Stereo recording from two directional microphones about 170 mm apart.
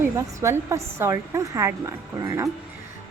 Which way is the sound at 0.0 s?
15° right (ahead or behind).